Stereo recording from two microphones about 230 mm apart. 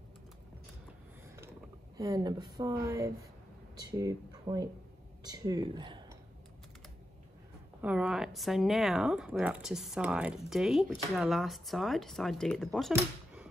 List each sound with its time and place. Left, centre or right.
2.0 s a woman's voice: centre
7.8 s speech: centre